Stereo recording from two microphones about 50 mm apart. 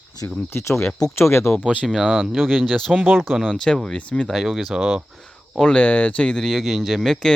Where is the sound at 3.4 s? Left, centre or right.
Centre.